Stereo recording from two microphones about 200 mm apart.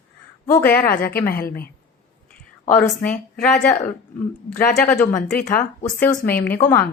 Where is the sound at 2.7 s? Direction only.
5° left (ahead or behind).